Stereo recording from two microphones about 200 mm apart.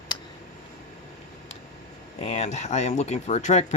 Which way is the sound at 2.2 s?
35° left (ahead or behind).